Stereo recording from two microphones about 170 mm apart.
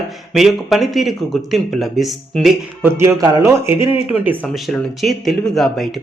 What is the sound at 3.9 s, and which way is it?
A man's voice, 10° right (ahead or behind).